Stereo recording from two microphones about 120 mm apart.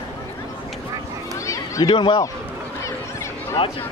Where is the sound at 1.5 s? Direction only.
30° left (ahead or behind).